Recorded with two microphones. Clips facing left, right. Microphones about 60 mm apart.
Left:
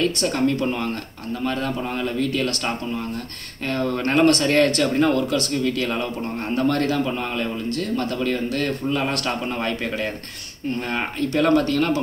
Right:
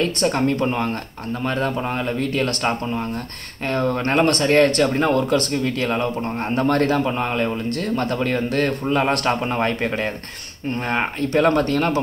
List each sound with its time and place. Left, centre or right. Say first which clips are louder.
0.2 s speech: right 2 dB; right